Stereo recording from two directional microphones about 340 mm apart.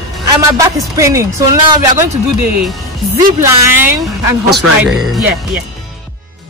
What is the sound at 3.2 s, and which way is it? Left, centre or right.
Speech, centre.